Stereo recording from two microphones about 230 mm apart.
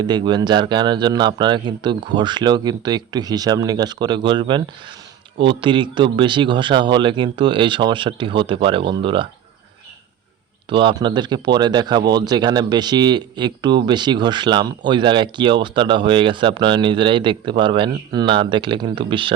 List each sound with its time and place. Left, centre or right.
0.0 s speech: centre
10.7 s speech: right